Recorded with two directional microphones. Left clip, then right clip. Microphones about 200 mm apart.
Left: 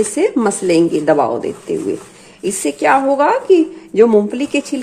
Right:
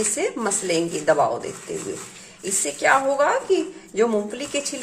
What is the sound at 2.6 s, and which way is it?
Speech, 35° left (ahead or behind).